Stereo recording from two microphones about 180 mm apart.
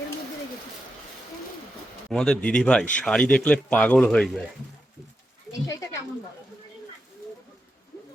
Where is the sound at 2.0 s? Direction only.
5° left (ahead or behind).